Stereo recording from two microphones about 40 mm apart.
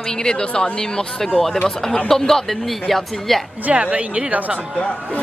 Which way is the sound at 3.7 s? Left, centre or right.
Right.